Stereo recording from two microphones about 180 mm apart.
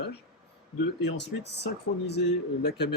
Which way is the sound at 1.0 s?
75° left (ahead or behind).